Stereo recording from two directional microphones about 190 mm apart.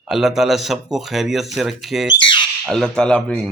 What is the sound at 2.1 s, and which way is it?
Speech, 25° left (ahead or behind).